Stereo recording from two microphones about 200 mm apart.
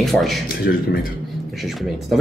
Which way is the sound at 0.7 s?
55° left (ahead or behind).